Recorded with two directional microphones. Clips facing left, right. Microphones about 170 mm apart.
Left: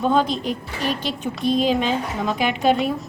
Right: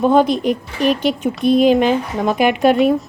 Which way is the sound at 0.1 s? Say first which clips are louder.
Right 5 dB; 55° right (ahead or behind).